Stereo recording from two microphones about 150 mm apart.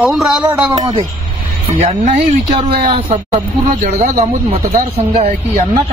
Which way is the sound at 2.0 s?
55° right (ahead or behind).